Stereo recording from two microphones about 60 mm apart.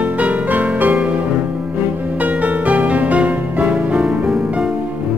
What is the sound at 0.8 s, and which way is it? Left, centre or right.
Music, centre.